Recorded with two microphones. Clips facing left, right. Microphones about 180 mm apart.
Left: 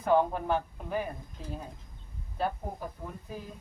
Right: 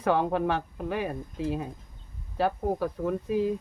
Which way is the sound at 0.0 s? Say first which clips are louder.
Right 1 dB; 80° right.